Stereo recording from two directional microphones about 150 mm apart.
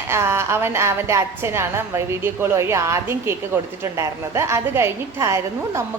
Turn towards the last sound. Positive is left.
turn(degrees=-20)  # may be behind; listen again after turning